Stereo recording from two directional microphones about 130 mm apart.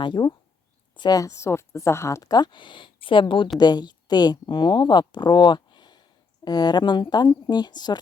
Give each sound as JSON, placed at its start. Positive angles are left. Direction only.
{"t": 0.0, "sound": "speech", "side_deg": 35}